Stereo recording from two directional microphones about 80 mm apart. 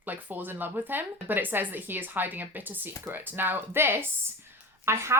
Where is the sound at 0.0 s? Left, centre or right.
Right.